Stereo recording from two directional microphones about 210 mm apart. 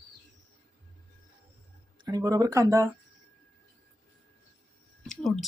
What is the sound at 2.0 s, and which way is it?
Speech, 15° right (ahead or behind).